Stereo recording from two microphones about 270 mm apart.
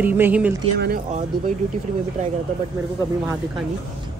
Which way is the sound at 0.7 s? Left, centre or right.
Right.